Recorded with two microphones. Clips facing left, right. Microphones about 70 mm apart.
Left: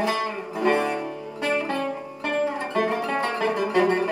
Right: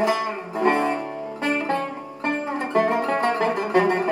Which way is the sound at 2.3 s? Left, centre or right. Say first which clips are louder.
Even; right.